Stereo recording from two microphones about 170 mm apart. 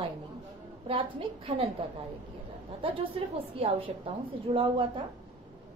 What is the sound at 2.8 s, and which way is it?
A woman's voice, 30° right (ahead or behind).